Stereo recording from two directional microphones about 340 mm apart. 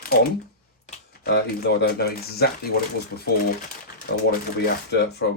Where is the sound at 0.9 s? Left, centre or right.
Left.